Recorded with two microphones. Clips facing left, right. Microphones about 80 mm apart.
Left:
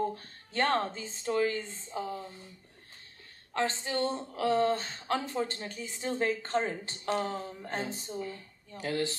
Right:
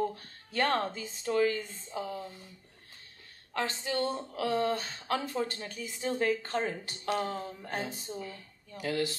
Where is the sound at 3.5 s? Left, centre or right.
Left.